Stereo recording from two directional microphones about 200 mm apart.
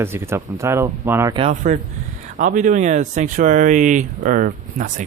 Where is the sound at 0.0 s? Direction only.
10° right (ahead or behind).